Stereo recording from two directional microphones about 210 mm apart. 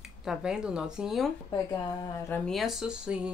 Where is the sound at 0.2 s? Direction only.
5° right (ahead or behind).